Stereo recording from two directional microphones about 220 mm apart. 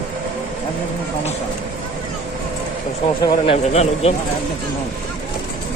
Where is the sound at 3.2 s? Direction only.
25° left (ahead or behind).